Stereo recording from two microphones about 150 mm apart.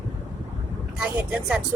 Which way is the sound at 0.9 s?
5° right (ahead or behind).